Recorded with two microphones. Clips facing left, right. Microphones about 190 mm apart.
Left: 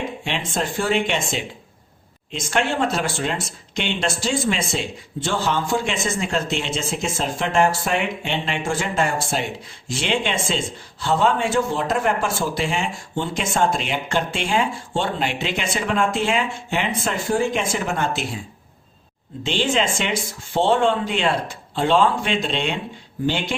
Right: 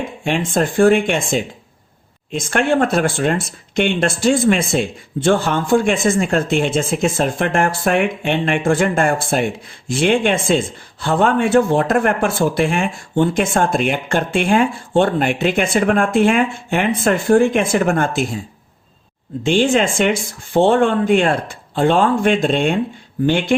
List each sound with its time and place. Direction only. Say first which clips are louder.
0.3 s speech: right 10 dB; 50° right (ahead or behind)
19.4 s speech: right 7 dB; 50° right (ahead or behind)